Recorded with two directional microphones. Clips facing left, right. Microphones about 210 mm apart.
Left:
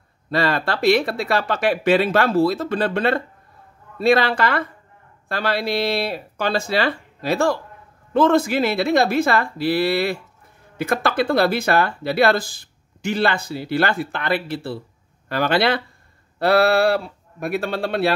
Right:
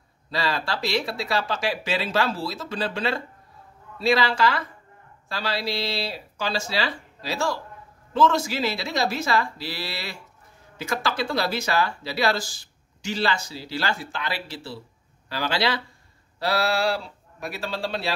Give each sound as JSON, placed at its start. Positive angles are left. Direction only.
{"t": 0.3, "sound": "speech", "side_deg": 55}